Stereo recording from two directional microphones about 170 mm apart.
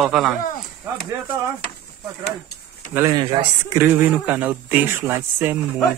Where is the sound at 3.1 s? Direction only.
30° right (ahead or behind).